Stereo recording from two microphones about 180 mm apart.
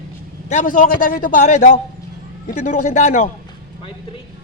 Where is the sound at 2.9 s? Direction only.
40° left (ahead or behind).